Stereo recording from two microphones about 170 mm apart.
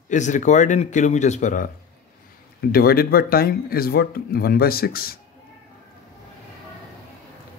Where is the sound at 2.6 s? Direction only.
60° left (ahead or behind).